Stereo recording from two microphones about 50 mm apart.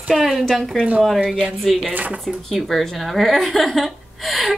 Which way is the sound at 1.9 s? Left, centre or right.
Right.